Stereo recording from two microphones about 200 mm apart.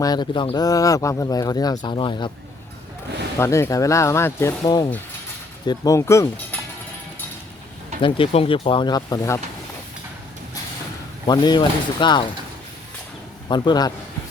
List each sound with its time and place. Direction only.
0.0 s speech: 20° left (ahead or behind)
3.3 s speech: 15° left (ahead or behind)
8.0 s speech: 30° left (ahead or behind)
11.3 s speech: 20° left (ahead or behind)
13.5 s speech: 20° left (ahead or behind)